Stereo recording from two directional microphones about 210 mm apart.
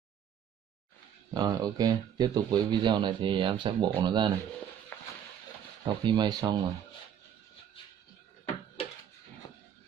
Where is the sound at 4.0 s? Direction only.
20° right (ahead or behind).